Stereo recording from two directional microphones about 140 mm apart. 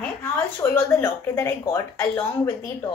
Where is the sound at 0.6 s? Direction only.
15° left (ahead or behind).